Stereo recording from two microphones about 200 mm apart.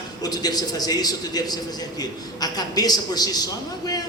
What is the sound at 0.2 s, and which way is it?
A man's voice, 20° left (ahead or behind).